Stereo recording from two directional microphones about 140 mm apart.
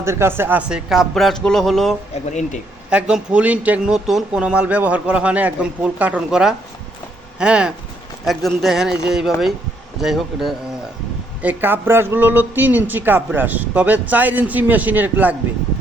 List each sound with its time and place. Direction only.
0.0 s speech: 20° right (ahead or behind)
0.9 s a man's voice: centre (ahead or behind)
2.3 s speech: 60° left (ahead or behind)
2.9 s a man's voice: 5° right (ahead or behind)
11.4 s speech: 15° right (ahead or behind)